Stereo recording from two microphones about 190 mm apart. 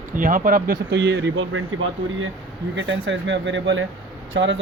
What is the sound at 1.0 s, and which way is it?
Speech, 65° right (ahead or behind).